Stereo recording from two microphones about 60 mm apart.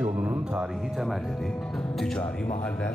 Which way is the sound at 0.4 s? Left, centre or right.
Centre.